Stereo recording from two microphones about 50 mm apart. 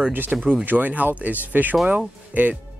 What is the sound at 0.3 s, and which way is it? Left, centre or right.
Speech, centre.